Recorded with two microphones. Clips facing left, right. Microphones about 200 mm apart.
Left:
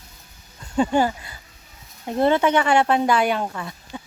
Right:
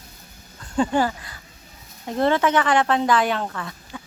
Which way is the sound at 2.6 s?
10° left (ahead or behind).